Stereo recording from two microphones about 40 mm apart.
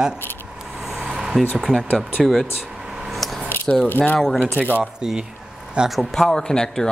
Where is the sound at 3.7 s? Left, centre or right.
Centre.